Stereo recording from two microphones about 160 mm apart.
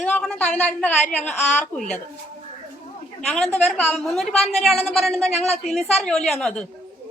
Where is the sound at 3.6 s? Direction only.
5° left (ahead or behind).